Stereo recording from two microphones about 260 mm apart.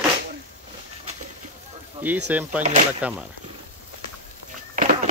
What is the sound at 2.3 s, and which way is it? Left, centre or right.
Speech, centre.